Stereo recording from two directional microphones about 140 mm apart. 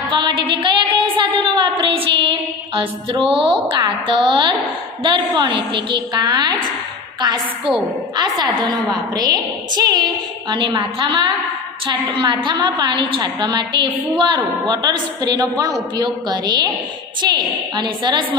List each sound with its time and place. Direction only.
0.1 s a sound: 35° right (ahead or behind)
3.8 s a woman's voice: 35° right (ahead or behind)
8.2 s a woman's voice: 30° right (ahead or behind)